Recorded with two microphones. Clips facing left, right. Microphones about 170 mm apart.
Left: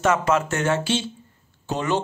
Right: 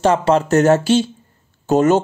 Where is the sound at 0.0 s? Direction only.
30° right (ahead or behind).